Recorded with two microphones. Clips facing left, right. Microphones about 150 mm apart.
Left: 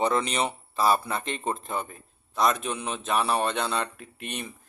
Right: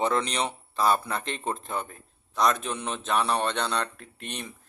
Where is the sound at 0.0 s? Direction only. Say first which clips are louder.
Left 1 dB; 5° left (ahead or behind).